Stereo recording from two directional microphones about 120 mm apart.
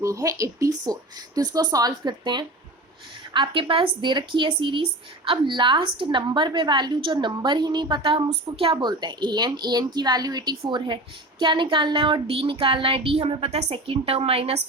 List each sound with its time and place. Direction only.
0.0 s speech: 25° right (ahead or behind); by 14.6 s 55° right (ahead or behind)